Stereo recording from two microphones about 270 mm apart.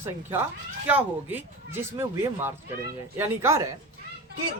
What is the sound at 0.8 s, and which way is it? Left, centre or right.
A woman's voice, centre.